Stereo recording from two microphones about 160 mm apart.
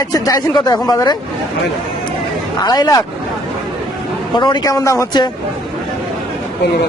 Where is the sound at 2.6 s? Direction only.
25° left (ahead or behind).